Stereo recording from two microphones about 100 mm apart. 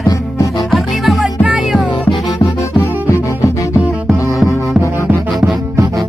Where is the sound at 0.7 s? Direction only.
Centre (ahead or behind).